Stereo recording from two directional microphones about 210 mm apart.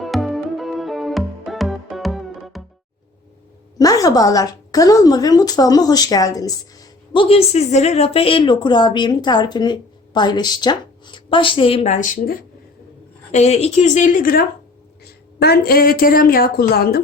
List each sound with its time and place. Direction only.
0.0 s music: centre (ahead or behind)
3.8 s a woman's voice: 15° left (ahead or behind); by 12.4 s 40° left (ahead or behind)
13.3 s a woman's voice: 30° left (ahead or behind); by 17.0 s 50° left (ahead or behind)